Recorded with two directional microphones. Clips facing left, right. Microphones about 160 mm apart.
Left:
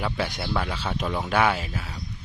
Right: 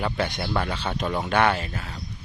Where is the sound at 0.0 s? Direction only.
Centre (ahead or behind).